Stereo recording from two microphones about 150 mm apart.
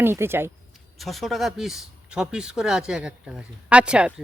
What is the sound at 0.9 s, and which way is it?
Speech, centre (ahead or behind).